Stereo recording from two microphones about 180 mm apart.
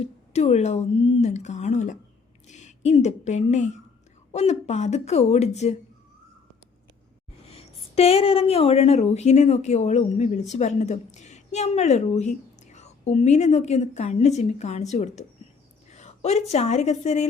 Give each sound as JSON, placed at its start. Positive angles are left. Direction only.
{"t": 0.0, "sound": "speech", "side_deg": 35}
{"t": 7.4, "sound": "a woman's voice", "side_deg": 35}